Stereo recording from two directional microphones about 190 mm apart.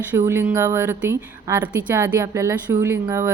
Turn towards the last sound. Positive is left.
turn(degrees=-15)  # may be behind; listen again after turning